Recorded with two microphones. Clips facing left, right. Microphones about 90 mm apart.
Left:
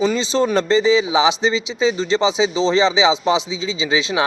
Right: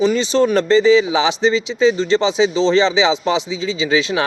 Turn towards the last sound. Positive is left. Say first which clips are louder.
# right 2 dB
turn(degrees=20)  # may be behind; listen again after turning